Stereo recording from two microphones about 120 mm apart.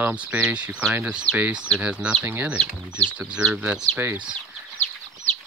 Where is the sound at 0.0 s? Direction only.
10° right (ahead or behind).